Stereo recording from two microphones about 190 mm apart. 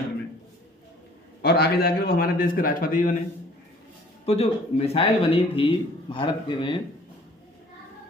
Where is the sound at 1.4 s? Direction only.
55° left (ahead or behind).